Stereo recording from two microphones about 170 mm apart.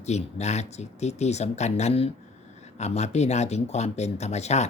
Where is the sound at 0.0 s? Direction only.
40° left (ahead or behind).